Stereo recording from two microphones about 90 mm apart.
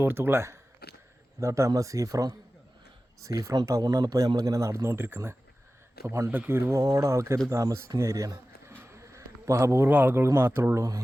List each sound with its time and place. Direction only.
0.0 s speech: 25° right (ahead or behind)
6.7 s speech: 35° right (ahead or behind)
8.7 s a sound: 25° right (ahead or behind)
9.9 s speech: 20° right (ahead or behind)